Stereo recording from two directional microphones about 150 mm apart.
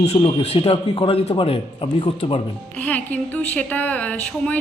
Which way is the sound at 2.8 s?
10° left (ahead or behind).